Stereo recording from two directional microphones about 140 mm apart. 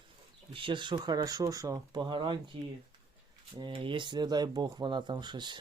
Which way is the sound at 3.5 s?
35° right (ahead or behind).